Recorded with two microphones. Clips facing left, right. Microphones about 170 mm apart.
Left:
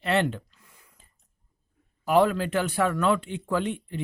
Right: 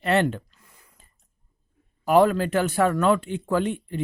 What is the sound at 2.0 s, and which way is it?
A man's voice, 45° right (ahead or behind).